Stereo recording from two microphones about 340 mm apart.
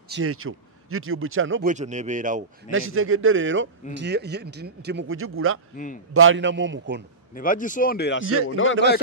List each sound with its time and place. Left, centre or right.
0.1 s speech: right
1.7 s speech: right
2.7 s speech: right
7.3 s speech: left